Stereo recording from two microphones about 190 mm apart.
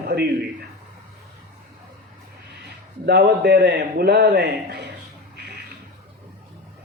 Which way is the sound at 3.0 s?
55° right (ahead or behind).